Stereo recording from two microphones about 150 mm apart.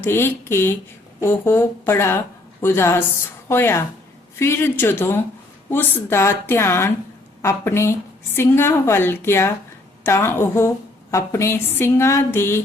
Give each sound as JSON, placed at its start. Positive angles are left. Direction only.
{"t": 0.0, "sound": "a woman's voice", "side_deg": 15}